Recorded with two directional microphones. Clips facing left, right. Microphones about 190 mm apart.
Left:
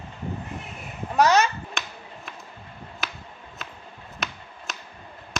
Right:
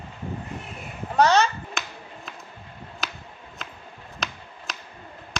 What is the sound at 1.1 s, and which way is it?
Chop, 5° left (ahead or behind).